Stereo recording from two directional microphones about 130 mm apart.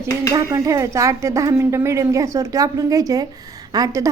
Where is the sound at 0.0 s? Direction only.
25° right (ahead or behind).